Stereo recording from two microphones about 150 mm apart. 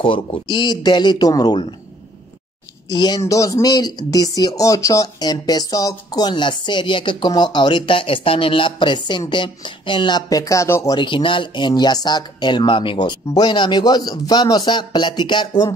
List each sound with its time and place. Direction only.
0.0 s speech: 35° left (ahead or behind)
2.9 s speech: 25° left (ahead or behind)
11.0 s speech: 30° left (ahead or behind)